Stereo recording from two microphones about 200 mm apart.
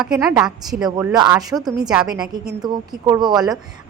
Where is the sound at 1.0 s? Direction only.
20° right (ahead or behind).